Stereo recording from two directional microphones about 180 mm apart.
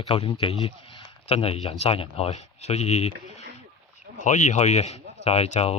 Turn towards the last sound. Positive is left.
turn(degrees=35)  # may be behind; listen again after turning